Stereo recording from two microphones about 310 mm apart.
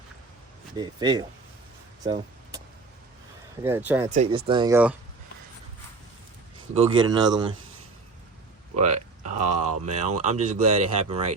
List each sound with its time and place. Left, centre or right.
0.8 s speech: centre
2.0 s vehicle: centre
3.6 s speech: centre
4.1 s speech: centre
6.7 s speech: centre
8.7 s speech: right